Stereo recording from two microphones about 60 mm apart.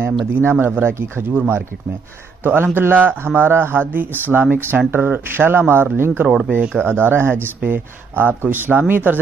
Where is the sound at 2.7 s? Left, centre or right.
Right.